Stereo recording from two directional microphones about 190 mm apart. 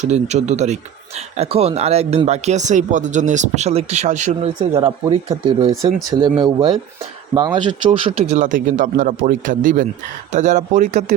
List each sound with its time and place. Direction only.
0.0 s speech: 35° right (ahead or behind)
4.7 s a man's voice: 20° right (ahead or behind); by 11.0 s 40° right (ahead or behind)